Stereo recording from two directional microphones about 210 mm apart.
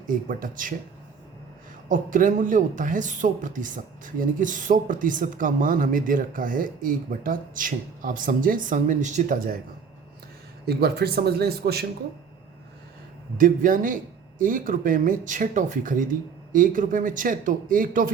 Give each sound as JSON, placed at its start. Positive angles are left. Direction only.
{"t": 0.1, "sound": "speech", "side_deg": -40}
{"t": 1.9, "sound": "speech", "side_deg": -40}
{"t": 10.7, "sound": "speech", "side_deg": -50}
{"t": 13.3, "sound": "speech", "side_deg": -40}